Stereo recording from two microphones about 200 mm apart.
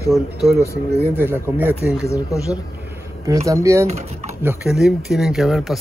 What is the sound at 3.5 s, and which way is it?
Speech, 15° right (ahead or behind).